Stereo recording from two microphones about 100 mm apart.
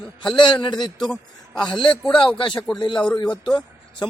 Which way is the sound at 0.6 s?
45° left (ahead or behind).